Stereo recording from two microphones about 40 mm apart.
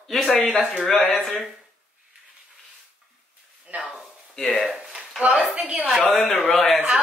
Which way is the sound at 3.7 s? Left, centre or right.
Right.